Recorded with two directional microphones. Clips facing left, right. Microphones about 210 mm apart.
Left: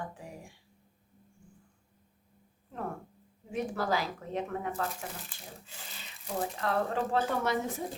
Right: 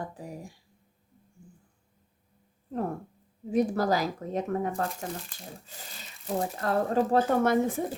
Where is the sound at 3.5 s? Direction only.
40° right (ahead or behind).